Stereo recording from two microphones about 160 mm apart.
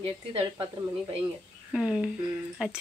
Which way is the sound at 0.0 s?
35° right (ahead or behind).